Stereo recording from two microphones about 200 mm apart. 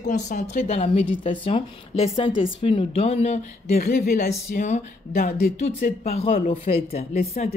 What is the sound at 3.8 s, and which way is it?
Speech, 50° left (ahead or behind).